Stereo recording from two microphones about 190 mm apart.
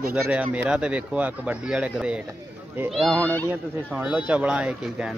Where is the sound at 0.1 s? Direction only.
10° right (ahead or behind).